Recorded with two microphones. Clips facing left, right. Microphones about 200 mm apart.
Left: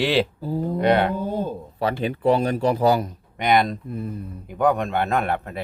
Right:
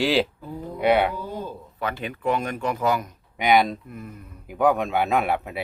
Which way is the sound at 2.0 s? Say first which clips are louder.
Left 6 dB; 35° left (ahead or behind).